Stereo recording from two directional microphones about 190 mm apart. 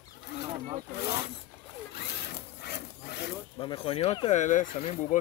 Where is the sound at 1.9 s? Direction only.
60° left (ahead or behind).